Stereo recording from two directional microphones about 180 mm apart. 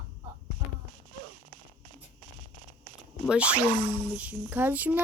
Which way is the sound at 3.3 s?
5° right (ahead or behind).